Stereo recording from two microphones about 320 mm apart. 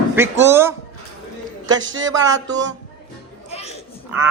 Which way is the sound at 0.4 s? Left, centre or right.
Centre.